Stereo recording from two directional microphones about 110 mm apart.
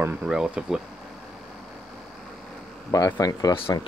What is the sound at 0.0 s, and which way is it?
Speech, 15° right (ahead or behind).